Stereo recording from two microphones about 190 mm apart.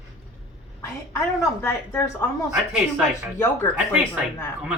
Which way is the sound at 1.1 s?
15° left (ahead or behind).